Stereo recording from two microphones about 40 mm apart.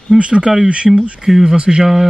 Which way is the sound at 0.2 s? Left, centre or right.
Right.